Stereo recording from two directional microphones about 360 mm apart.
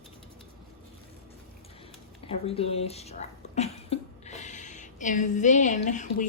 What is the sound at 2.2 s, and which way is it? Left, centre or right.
Speech, centre.